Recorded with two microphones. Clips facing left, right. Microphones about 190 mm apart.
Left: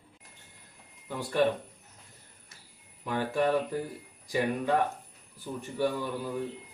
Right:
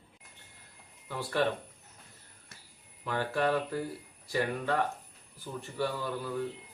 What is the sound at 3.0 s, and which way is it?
A man's voice, 15° left (ahead or behind).